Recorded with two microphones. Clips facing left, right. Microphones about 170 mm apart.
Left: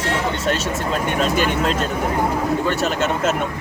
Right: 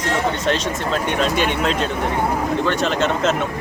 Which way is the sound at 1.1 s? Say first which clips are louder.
Left 1 dB; 45° left (ahead or behind).